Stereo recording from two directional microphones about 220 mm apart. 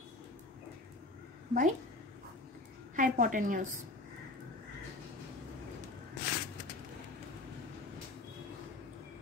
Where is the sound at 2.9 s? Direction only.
35° right (ahead or behind).